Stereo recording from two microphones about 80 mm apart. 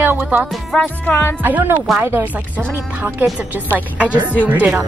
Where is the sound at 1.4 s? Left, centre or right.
Right.